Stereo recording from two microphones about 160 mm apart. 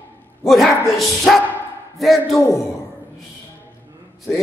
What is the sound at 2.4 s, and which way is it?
Speech, 20° left (ahead or behind).